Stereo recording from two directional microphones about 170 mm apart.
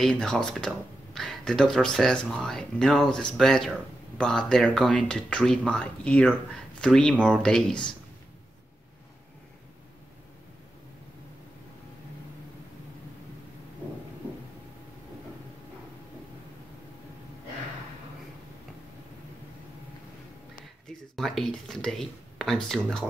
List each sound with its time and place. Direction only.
0.0 s speech: 5° left (ahead or behind)
21.2 s speech: centre (ahead or behind)